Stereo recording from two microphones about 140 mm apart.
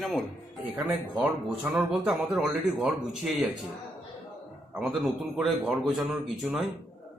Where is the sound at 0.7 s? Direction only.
10° right (ahead or behind).